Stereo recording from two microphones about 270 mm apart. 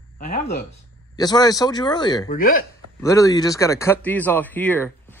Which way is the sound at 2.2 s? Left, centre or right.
Left.